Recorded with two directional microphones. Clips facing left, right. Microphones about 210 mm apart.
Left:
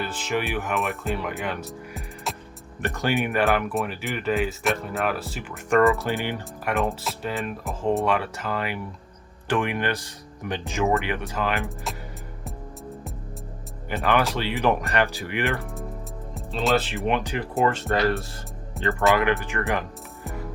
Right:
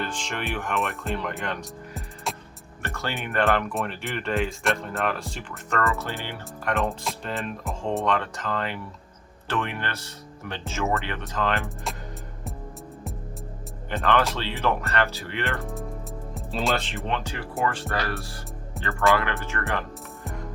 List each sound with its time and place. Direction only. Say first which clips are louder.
0.0 s speech: left 4 dB; 5° left (ahead or behind)
2.3 s music: even; centre (ahead or behind)
2.8 s speech: left 7 dB; 15° left (ahead or behind)
3.4 s speech: left 1 dB; 5° left (ahead or behind)
6.7 s speech: left 2 dB; centre (ahead or behind)
13.9 s speech: left 1 dB; 15° left (ahead or behind)
16.3 s speech: left 4 dB; centre (ahead or behind); by 18.3 s 20° left (ahead or behind)
18.8 s music: left 7 dB; centre (ahead or behind)
19.1 s speech: left 4 dB; 15° left (ahead or behind)
20.2 s music: left 2 dB; 5° left (ahead or behind)